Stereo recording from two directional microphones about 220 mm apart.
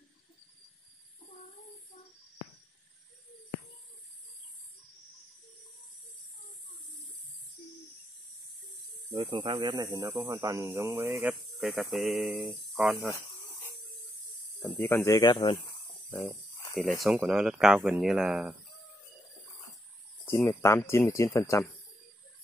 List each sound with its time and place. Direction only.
9.1 s speech: 25° right (ahead or behind)
11.6 s speech: centre (ahead or behind)
14.6 s speech: 10° left (ahead or behind)
17.0 s speech: centre (ahead or behind)
20.2 s speech: 10° left (ahead or behind)